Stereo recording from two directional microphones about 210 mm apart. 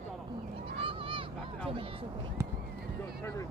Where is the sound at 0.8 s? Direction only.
25° right (ahead or behind).